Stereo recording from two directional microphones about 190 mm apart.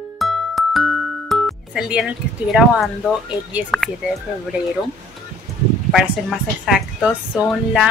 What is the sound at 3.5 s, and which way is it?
Speech, centre (ahead or behind).